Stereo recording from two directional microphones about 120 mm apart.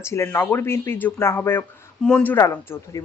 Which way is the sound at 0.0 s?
25° left (ahead or behind).